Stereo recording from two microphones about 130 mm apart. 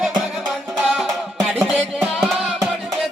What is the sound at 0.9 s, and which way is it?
Music, centre (ahead or behind).